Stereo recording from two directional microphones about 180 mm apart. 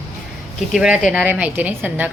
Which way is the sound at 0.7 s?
5° right (ahead or behind).